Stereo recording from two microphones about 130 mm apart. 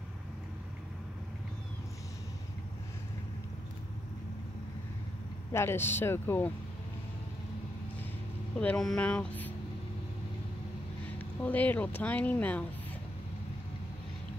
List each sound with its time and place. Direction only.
5.5 s speech: 20° left (ahead or behind)
8.5 s speech: 5° left (ahead or behind)
11.4 s speech: 15° left (ahead or behind)